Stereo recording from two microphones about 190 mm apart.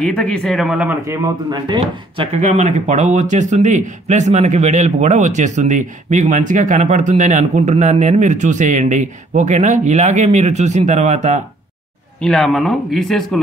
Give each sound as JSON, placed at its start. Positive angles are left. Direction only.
{"t": 0.0, "sound": "speech", "side_deg": 5}
{"t": 2.3, "sound": "speech", "side_deg": -35}
{"t": 12.2, "sound": "speech", "side_deg": 0}